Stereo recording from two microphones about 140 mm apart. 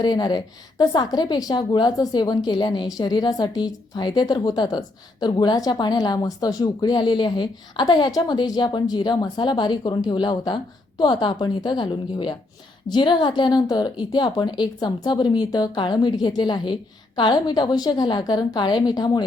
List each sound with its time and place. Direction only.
0.0 s a woman's voice: 30° left (ahead or behind)